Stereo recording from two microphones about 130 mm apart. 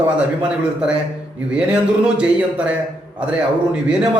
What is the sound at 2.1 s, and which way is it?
Speech, 10° right (ahead or behind).